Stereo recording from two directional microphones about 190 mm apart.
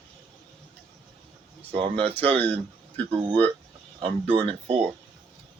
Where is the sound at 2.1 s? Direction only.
10° left (ahead or behind).